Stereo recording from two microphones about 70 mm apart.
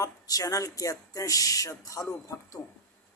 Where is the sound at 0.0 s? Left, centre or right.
Left.